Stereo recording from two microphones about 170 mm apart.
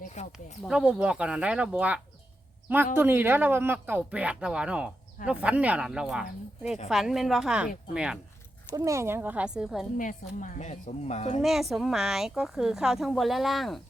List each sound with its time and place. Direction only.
0.0 s a sound: 45° left (ahead or behind)
0.3 s speech: 5° right (ahead or behind)
8.7 s speech: 20° right (ahead or behind)
10.0 s speech: 50° left (ahead or behind)
11.4 s speech: centre (ahead or behind)